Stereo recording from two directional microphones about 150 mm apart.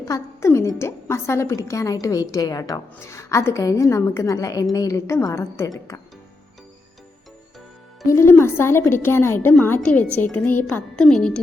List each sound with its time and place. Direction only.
0.1 s a woman's voice: 20° left (ahead or behind)
8.1 s a woman's voice: 15° left (ahead or behind)